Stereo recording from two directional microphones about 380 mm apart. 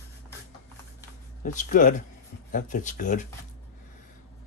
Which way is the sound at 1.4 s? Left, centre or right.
Centre.